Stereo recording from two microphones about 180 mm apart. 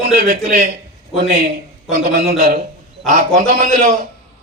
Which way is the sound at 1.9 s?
55° right (ahead or behind).